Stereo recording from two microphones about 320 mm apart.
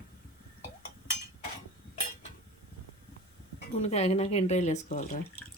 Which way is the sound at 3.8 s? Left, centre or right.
Centre.